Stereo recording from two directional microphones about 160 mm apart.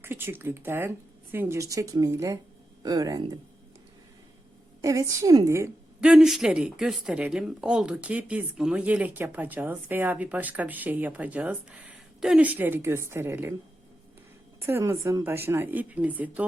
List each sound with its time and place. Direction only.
0.0 s a woman's voice: 15° right (ahead or behind)
4.8 s a woman's voice: 20° right (ahead or behind)
6.0 s speech: 5° right (ahead or behind)
14.7 s speech: 15° right (ahead or behind)